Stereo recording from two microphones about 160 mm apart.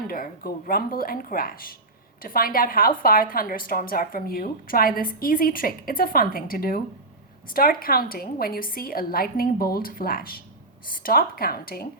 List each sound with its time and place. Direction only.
0.1 s a woman's voice: 65° left (ahead or behind)